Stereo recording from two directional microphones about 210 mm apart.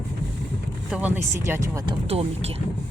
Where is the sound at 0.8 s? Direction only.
5° right (ahead or behind).